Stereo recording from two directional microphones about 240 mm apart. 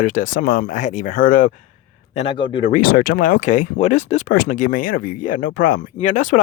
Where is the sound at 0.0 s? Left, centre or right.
Left.